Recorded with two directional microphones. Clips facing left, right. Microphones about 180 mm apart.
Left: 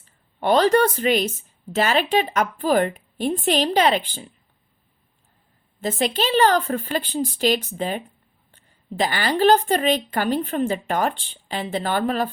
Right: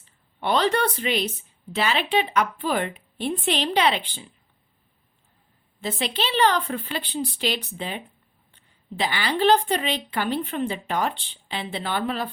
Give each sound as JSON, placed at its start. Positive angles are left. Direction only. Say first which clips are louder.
{"t": 0.0, "sound": "a woman's voice", "louder": "left 5 dB", "side_deg": 45}
{"t": 5.8, "sound": "a woman's voice", "louder": "left 5 dB", "side_deg": 45}